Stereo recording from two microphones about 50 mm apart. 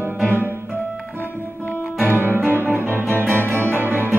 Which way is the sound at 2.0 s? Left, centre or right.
Right.